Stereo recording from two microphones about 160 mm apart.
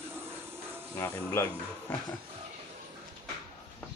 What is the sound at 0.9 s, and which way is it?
Speech, 15° left (ahead or behind).